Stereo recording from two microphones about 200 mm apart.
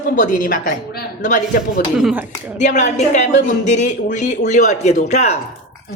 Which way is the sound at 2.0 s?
5° right (ahead or behind).